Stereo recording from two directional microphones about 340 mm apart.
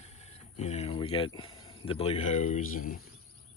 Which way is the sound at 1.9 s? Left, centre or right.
Centre.